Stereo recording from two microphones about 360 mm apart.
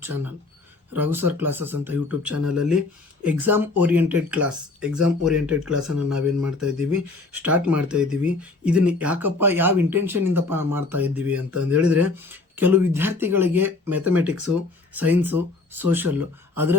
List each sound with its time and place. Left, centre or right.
0.9 s speech: centre